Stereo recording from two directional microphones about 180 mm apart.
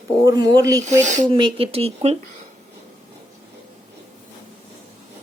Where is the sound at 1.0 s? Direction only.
40° right (ahead or behind).